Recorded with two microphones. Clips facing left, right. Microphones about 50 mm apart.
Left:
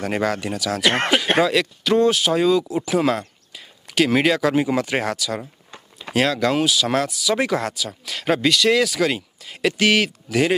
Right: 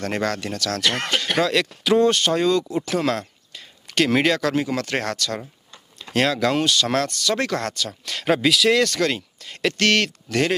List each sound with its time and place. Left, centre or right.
0.0 s speech: centre